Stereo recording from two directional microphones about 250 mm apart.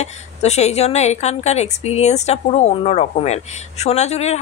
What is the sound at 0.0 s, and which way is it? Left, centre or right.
Speech, left.